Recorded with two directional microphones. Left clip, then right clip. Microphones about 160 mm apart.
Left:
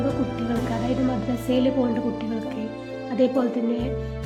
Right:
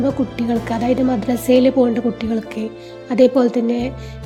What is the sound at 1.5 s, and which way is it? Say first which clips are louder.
A woman's voice: right 9 dB; 50° right (ahead or behind).